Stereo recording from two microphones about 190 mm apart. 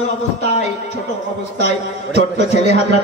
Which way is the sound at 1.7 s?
35° left (ahead or behind).